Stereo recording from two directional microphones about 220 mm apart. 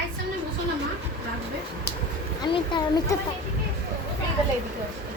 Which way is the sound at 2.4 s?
20° left (ahead or behind).